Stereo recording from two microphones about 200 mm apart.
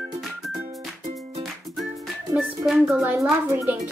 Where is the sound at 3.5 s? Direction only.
15° right (ahead or behind).